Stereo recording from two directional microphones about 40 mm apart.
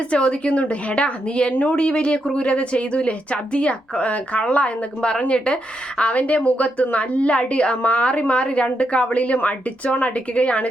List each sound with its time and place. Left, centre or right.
0.1 s a woman's voice: left